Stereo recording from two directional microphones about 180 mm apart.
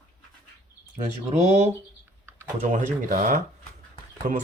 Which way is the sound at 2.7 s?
45° right (ahead or behind).